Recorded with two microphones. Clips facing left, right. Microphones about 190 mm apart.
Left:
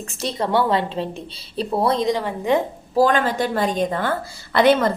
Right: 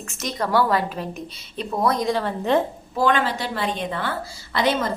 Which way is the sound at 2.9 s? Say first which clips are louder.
Left 4 dB; 40° left (ahead or behind).